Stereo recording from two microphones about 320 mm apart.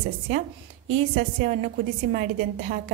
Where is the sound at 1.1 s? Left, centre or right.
Right.